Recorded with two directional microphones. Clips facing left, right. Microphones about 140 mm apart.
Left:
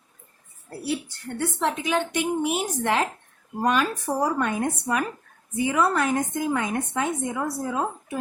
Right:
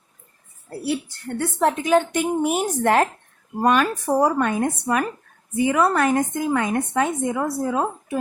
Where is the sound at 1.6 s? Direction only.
45° right (ahead or behind).